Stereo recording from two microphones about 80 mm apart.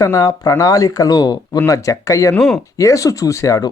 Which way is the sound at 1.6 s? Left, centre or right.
Left.